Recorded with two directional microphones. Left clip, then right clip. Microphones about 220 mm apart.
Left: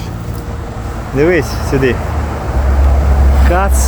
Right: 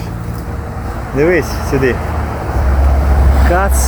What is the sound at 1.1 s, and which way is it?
Speech, 10° left (ahead or behind).